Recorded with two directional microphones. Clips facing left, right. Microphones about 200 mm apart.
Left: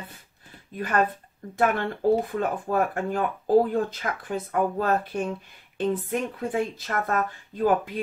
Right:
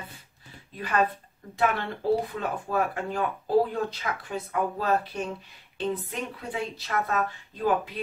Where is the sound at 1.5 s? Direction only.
50° left (ahead or behind).